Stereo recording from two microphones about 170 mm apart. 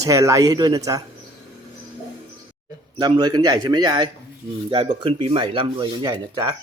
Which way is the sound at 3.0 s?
25° right (ahead or behind).